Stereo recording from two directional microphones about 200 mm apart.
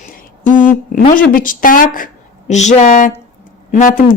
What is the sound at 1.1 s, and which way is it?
A woman's voice, 45° left (ahead or behind).